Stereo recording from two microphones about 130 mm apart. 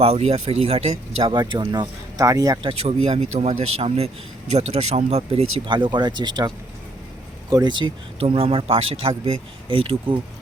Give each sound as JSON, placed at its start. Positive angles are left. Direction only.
{"t": 0.0, "sound": "speech", "side_deg": -50}
{"t": 1.3, "sound": "speech", "side_deg": -35}
{"t": 2.6, "sound": "speech", "side_deg": -50}
{"t": 7.5, "sound": "speech", "side_deg": -35}